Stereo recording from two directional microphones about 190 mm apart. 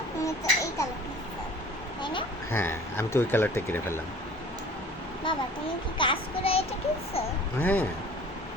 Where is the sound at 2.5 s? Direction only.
10° left (ahead or behind).